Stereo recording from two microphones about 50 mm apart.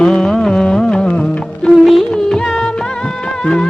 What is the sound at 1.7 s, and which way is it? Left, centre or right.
Music, centre.